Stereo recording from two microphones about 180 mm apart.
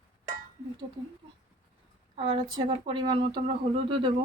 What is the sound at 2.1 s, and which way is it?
Speech, 30° right (ahead or behind).